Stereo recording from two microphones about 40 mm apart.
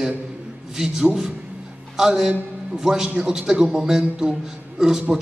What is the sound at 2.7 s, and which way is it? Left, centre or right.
A man's voice, centre.